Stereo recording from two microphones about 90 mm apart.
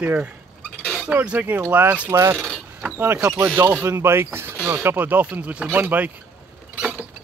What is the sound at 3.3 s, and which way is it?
Speech, 30° right (ahead or behind).